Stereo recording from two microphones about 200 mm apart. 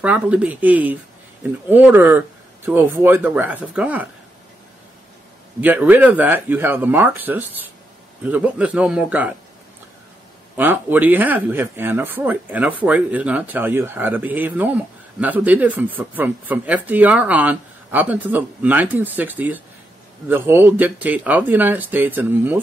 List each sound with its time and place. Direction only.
0.0 s speech: 5° right (ahead or behind)
5.6 s speech: 10° right (ahead or behind)
10.5 s speech: 10° right (ahead or behind)